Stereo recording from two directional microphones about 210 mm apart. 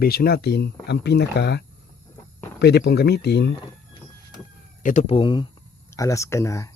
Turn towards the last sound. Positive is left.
turn(degrees=15)  # may be behind; listen again after turning